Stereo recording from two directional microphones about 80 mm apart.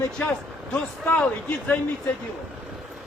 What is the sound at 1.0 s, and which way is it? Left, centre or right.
Speech, centre.